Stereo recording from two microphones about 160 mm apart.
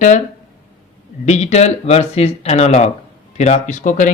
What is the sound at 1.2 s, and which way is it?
Speech, 45° left (ahead or behind).